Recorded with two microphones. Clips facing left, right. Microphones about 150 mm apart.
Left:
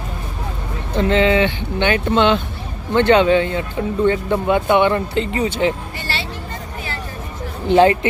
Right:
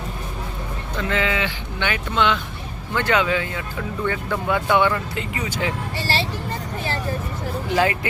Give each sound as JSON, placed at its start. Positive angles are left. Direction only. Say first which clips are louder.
{"t": 0.9, "sound": "speech", "louder": "left 9 dB", "side_deg": 25}
{"t": 6.0, "sound": "vehicle", "louder": "right 3 dB", "side_deg": -35}
{"t": 7.7, "sound": "speech", "louder": "left 9 dB", "side_deg": 30}